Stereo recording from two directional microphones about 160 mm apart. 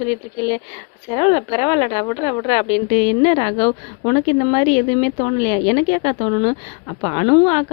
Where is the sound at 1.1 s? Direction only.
35° left (ahead or behind).